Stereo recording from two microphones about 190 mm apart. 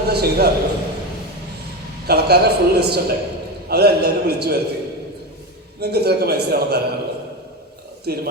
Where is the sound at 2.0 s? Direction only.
60° right (ahead or behind).